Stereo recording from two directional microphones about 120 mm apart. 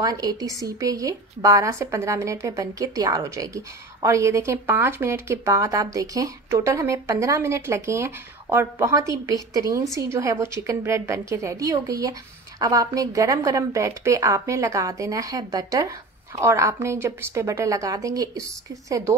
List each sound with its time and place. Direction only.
0.0 s a woman's voice: 30° right (ahead or behind)